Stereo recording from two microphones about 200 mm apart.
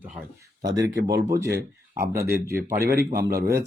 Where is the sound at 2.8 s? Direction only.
50° right (ahead or behind).